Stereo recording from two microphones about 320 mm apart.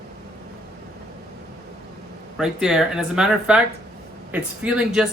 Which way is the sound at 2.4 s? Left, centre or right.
Centre.